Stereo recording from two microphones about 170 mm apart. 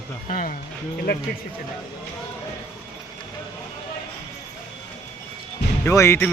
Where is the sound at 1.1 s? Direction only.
60° left (ahead or behind).